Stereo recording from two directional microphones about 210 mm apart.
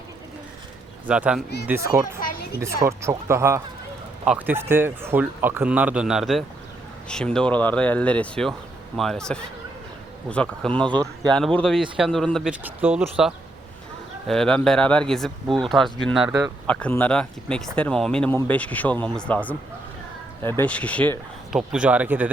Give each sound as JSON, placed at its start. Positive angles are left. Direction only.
{"t": 1.0, "sound": "a man's voice", "side_deg": -5}
{"t": 2.2, "sound": "a sound", "side_deg": 50}
{"t": 2.8, "sound": "a man's voice", "side_deg": -15}
{"t": 21.7, "sound": "a man's voice", "side_deg": -5}